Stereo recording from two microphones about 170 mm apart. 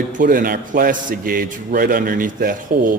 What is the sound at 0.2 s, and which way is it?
Speech, 55° right (ahead or behind).